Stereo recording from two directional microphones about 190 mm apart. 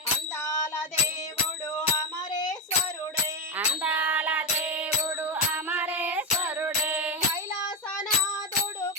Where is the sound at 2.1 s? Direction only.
20° left (ahead or behind).